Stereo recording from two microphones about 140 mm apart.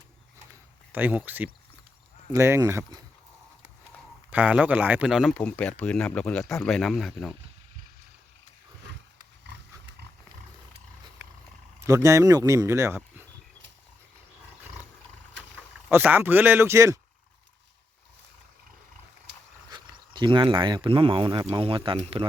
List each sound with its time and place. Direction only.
0.9 s speech: 10° right (ahead or behind)
4.3 s speech: 10° right (ahead or behind)
5.3 s speech: 10° left (ahead or behind)
11.9 s speech: 20° right (ahead or behind)
15.9 s speech: 15° right (ahead or behind)
19.7 s speech: 35° right (ahead or behind)